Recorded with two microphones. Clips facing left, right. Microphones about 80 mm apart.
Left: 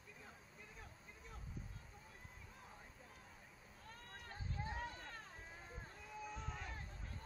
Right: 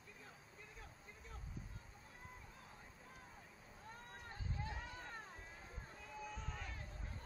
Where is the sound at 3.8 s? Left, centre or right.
Centre.